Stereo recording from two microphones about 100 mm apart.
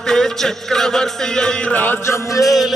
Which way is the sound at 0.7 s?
5° left (ahead or behind).